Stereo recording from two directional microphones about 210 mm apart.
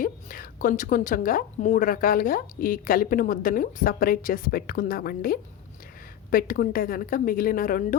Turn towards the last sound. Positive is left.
turn(degrees=40)  # may be behind; listen again after turning